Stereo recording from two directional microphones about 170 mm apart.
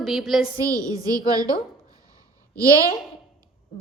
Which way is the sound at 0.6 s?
20° right (ahead or behind).